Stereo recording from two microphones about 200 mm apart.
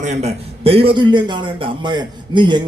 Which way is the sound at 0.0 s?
35° right (ahead or behind).